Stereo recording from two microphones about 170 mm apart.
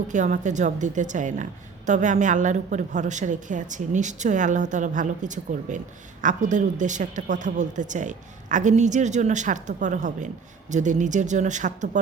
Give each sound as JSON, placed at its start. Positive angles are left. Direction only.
{"t": 0.1, "sound": "a woman's voice", "side_deg": -45}